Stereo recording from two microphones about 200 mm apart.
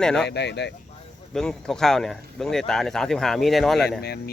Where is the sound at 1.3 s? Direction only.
5° left (ahead or behind).